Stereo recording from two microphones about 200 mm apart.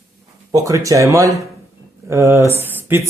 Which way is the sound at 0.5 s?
15° right (ahead or behind).